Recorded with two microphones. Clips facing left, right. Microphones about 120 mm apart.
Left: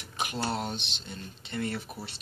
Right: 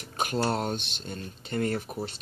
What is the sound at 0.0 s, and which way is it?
Speech, 45° right (ahead or behind).